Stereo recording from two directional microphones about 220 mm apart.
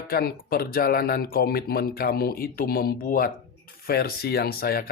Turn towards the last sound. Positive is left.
turn(degrees=45)  # may be behind; listen again after turning